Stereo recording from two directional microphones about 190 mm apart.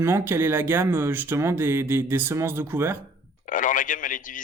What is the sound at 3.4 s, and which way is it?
Speech, 45° left (ahead or behind).